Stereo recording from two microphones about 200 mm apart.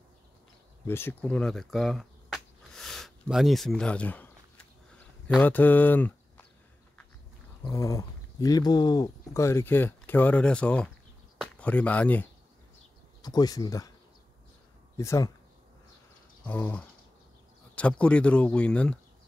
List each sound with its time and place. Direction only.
0.8 s speech: 10° left (ahead or behind)
4.9 s a sound: 5° left (ahead or behind)
7.6 s speech: 15° left (ahead or behind)
13.2 s speech: 20° left (ahead or behind)
15.0 s speech: 15° left (ahead or behind)
16.4 s speech: 10° left (ahead or behind)